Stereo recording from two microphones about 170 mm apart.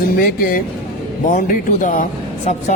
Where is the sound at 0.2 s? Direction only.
60° left (ahead or behind).